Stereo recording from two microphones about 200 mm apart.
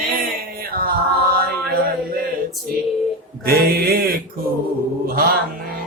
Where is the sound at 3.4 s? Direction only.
50° right (ahead or behind).